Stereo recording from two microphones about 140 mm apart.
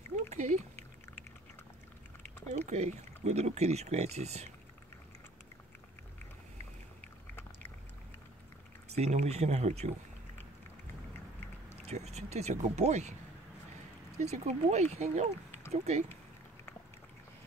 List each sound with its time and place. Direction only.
0.1 s a sound: 55° right (ahead or behind)
2.5 s speech: 50° right (ahead or behind)
8.9 s speech: 50° right (ahead or behind)
11.8 s speech: 50° right (ahead or behind)
14.1 s speech: 55° right (ahead or behind)